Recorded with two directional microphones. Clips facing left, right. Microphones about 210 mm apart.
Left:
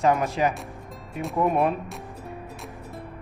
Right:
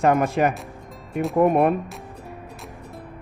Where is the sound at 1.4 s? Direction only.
55° right (ahead or behind).